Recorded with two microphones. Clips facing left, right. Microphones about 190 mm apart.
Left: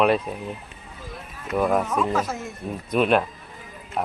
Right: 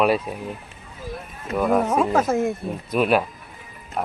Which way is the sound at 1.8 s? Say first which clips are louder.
Right 4 dB; 45° right (ahead or behind).